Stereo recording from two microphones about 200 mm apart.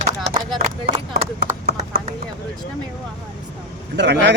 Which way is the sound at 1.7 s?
35° right (ahead or behind).